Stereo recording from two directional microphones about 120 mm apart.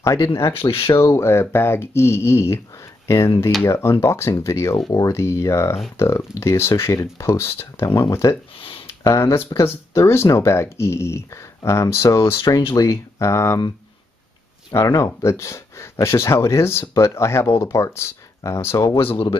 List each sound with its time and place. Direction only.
0.0 s speech: 25° left (ahead or behind)
0.6 s speech: 50° left (ahead or behind)
0.8 s speech: 25° left (ahead or behind)
8.5 s a sound: 50° left (ahead or behind)
8.8 s speech: 25° left (ahead or behind)
14.7 s speech: 30° left (ahead or behind)
18.9 s speech: 50° left (ahead or behind)